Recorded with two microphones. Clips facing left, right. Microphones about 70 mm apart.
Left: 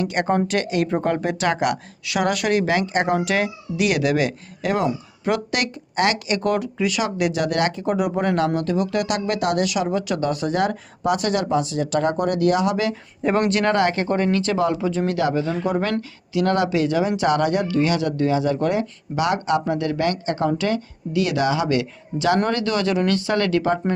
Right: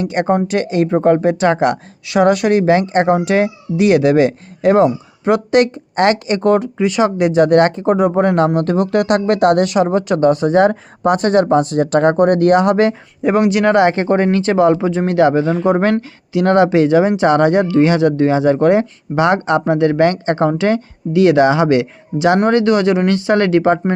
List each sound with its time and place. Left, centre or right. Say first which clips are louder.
0.0 s speech: right 5 dB; right
8.5 s speech: right 7 dB; right
11.0 s speech: right 8 dB; right
13.2 s speech: right 6 dB; centre; by 23.9 s right